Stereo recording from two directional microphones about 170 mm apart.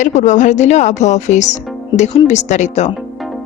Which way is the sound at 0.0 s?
45° left (ahead or behind).